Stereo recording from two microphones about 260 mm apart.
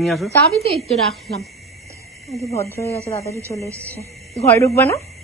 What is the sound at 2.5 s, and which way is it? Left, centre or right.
Speech, centre.